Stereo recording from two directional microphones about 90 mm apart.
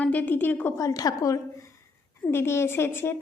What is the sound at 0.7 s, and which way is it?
Speech, 40° left (ahead or behind).